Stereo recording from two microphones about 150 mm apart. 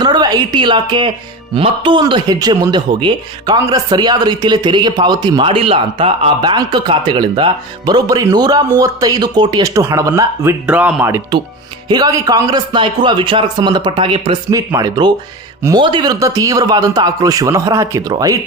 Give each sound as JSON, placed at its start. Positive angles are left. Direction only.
{"t": 0.0, "sound": "a woman's voice", "side_deg": -30}
{"t": 11.9, "sound": "a man's voice", "side_deg": -25}
{"t": 14.5, "sound": "a man's voice", "side_deg": -25}